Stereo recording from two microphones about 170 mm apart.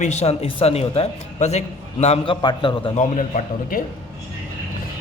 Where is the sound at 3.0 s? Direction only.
50° left (ahead or behind).